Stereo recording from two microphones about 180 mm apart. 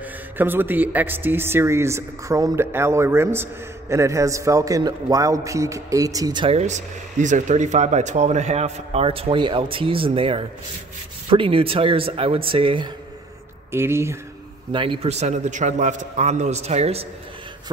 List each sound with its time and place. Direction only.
0.0 s a man's voice: 10° right (ahead or behind); by 12.9 s 25° right (ahead or behind)
13.7 s speech: 15° right (ahead or behind)
14.7 s a man's voice: 30° right (ahead or behind)